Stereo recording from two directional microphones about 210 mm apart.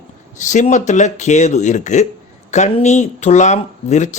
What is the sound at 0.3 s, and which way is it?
Speech, 35° left (ahead or behind).